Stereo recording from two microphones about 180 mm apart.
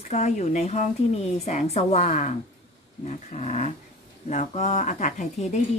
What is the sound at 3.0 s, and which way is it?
Dog, 40° left (ahead or behind).